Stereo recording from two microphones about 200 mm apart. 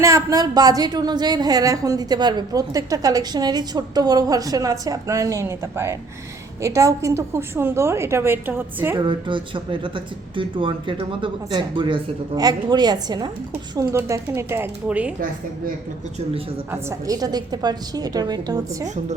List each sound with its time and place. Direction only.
0.0 s a woman's voice: 15° right (ahead or behind)
9.0 s a woman's voice: 25° right (ahead or behind); by 15.1 s 5° right (ahead or behind)
16.7 s speech: 15° right (ahead or behind)